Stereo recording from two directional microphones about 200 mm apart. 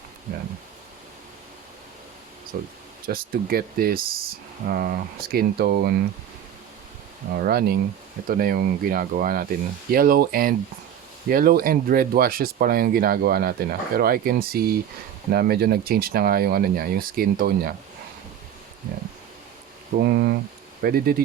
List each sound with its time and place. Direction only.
2.5 s speech: 45° right (ahead or behind)
7.3 s speech: 50° right (ahead or behind)
20.0 s speech: 55° right (ahead or behind)